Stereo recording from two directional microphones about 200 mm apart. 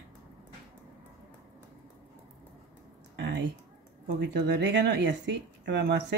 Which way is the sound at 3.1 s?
60° right (ahead or behind).